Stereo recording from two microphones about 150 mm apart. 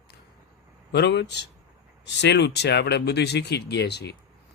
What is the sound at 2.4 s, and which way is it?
Speech, 90° left.